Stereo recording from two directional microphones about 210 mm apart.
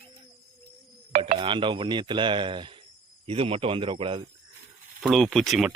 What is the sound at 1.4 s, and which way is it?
Speech, 25° right (ahead or behind).